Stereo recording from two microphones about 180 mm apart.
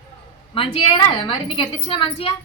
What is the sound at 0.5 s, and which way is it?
A woman's voice, 30° left (ahead or behind).